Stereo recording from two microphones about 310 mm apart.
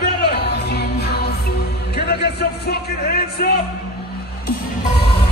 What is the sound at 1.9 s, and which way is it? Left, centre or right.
Speech, left.